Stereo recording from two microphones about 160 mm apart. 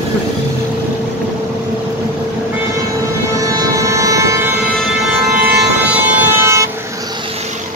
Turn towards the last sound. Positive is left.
turn(degrees=-15)  # may be behind; listen again after turning